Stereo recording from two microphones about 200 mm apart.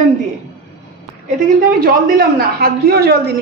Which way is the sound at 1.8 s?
45° right (ahead or behind).